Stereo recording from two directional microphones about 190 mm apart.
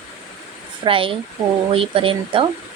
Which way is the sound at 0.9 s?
30° right (ahead or behind).